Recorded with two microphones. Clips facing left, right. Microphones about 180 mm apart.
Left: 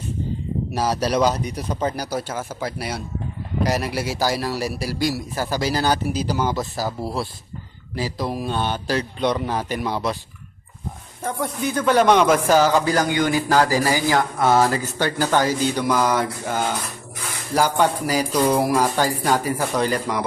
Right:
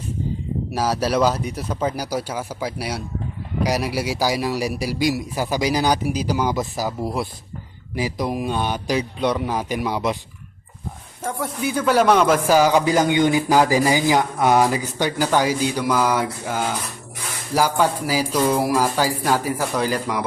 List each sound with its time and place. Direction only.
0.7 s speech: 5° right (ahead or behind)
11.2 s speech: 5° right (ahead or behind)